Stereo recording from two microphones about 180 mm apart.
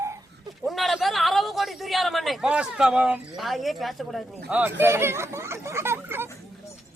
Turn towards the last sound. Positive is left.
turn(degrees=-10)  # may be behind; listen again after turning